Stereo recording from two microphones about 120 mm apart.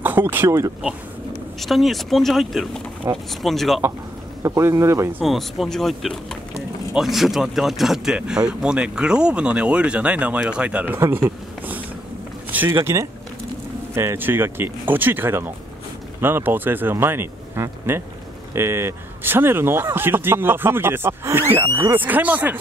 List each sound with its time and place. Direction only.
0.0 s speech: 15° right (ahead or behind)
1.6 s speech: centre (ahead or behind)
3.1 s speech: 20° right (ahead or behind)
3.4 s speech: centre (ahead or behind)
4.4 s speech: 25° right (ahead or behind)
5.2 s speech: centre (ahead or behind)
11.0 s a sound: 20° right (ahead or behind)
12.8 s speech: 25° right (ahead or behind)